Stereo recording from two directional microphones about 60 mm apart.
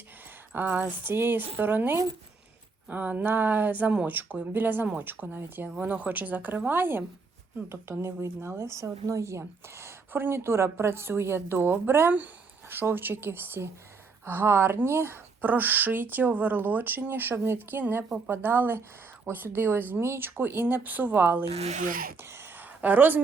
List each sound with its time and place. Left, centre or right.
0.5 s speech: right
7.7 s a woman's voice: right
8.7 s a woman's voice: right
15.4 s speech: right
22.2 s a sound: right
22.8 s speech: right